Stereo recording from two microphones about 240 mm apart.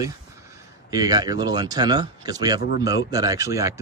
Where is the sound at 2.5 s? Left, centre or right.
Left.